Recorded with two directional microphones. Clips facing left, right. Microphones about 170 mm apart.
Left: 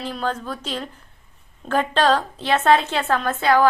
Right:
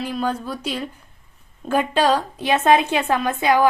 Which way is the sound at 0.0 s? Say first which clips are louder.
Right 2 dB; 10° right (ahead or behind).